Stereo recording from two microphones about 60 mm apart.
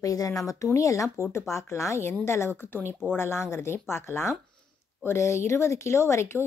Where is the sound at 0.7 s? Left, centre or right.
Left.